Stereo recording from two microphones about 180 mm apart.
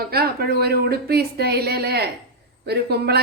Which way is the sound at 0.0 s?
60° right (ahead or behind).